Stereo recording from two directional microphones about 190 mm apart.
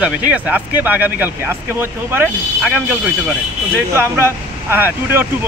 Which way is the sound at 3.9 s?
15° right (ahead or behind).